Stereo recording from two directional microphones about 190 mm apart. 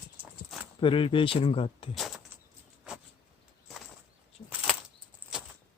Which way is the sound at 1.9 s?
Centre (ahead or behind).